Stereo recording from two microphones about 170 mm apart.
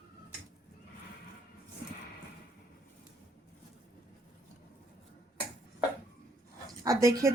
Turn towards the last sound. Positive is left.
turn(degrees=-20)  # may be behind; listen again after turning